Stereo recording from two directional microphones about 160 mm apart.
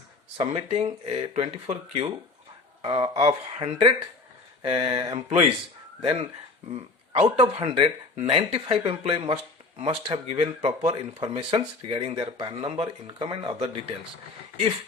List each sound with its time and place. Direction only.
0.3 s speech: 40° right (ahead or behind)